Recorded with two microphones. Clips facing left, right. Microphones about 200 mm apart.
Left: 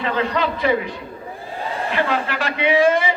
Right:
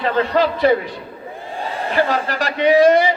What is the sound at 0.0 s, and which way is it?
Speech, 40° right (ahead or behind).